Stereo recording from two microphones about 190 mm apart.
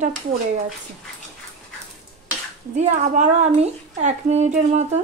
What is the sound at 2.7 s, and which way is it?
Speech, 40° right (ahead or behind).